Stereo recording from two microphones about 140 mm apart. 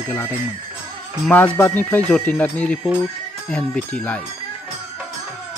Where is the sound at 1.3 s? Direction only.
10° left (ahead or behind).